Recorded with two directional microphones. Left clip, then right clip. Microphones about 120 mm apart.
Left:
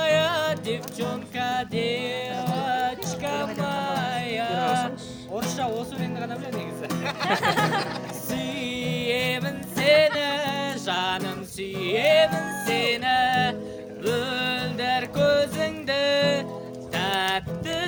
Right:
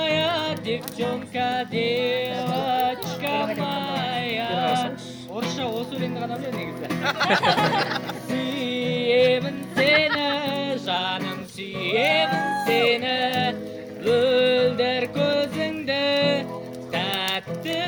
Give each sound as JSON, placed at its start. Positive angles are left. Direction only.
{"t": 0.0, "sound": "music", "side_deg": 60}
{"t": 5.4, "sound": "music", "side_deg": 80}
{"t": 7.0, "sound": "music", "side_deg": -10}
{"t": 8.3, "sound": "music", "side_deg": 65}